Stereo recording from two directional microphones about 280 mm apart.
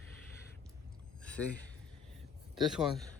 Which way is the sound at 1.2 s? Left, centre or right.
Centre.